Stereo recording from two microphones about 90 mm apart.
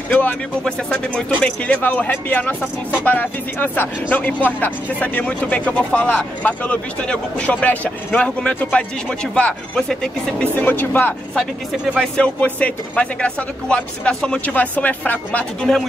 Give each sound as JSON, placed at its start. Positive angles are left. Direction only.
{"t": 0.1, "sound": "speech", "side_deg": 20}
{"t": 12.2, "sound": "speech", "side_deg": 15}